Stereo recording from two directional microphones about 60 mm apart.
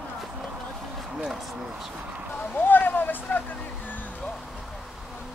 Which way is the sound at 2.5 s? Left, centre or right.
Left.